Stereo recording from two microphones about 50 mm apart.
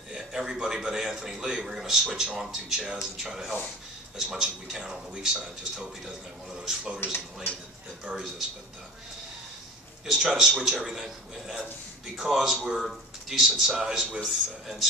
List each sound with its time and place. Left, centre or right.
0.1 s a man's voice: centre
8.1 s a man's voice: centre
10.0 s a man's voice: centre
14.2 s a man's voice: centre